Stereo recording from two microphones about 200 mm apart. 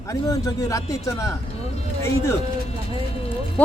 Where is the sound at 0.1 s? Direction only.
15° left (ahead or behind).